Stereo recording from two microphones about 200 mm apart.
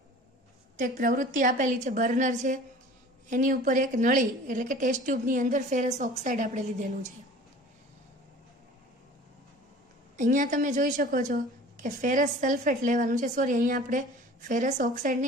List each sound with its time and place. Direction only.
0.8 s a woman's voice: 40° right (ahead or behind)
10.2 s a woman's voice: 40° right (ahead or behind)